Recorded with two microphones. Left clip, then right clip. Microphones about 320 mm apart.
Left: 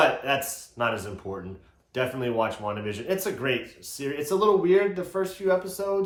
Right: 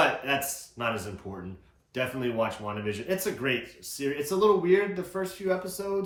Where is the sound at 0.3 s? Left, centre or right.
Centre.